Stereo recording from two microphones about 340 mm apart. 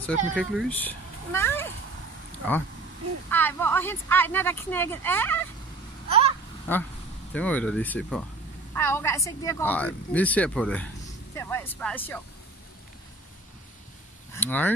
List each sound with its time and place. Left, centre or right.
0.0 s speech: centre
3.3 s speech: centre
6.0 s vehicle: centre
6.7 s a woman's voice: centre
14.3 s speech: centre